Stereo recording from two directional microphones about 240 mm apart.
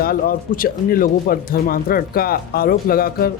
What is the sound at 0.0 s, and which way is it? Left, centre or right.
Speech, left.